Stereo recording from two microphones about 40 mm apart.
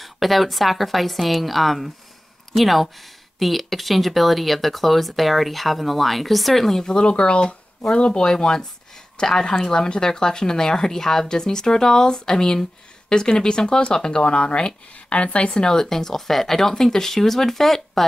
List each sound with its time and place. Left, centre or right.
0.0 s speech: centre